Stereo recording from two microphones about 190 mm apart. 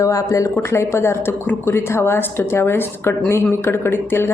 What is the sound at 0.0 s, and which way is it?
Speech, 15° left (ahead or behind).